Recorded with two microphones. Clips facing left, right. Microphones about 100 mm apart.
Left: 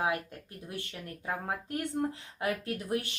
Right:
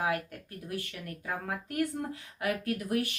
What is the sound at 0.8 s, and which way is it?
Speech, 25° left (ahead or behind).